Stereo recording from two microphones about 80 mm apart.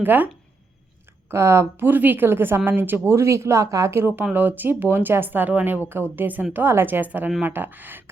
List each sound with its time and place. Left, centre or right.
0.0 s speech: right
1.3 s speech: right
3.9 s speech: right